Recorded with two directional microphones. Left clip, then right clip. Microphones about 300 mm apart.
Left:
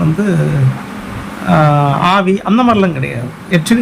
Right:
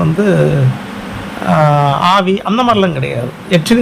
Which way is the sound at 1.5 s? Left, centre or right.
Right.